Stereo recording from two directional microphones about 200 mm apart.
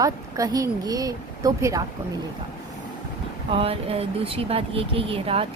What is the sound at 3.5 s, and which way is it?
Speech, 30° right (ahead or behind).